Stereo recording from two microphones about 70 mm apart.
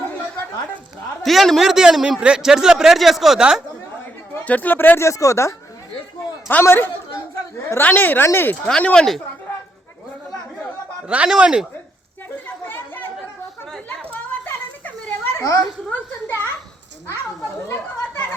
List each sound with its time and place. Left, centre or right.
1.2 s a man's voice: centre
4.4 s speech: left
5.0 s speech: left
6.5 s speech: left
8.6 s speech: centre
11.3 s speech: centre
12.6 s chatter: left
14.1 s children playing: left
15.9 s a sound: left
17.7 s chatter: left